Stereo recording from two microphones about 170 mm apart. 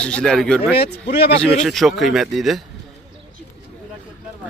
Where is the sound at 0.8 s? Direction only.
75° left (ahead or behind).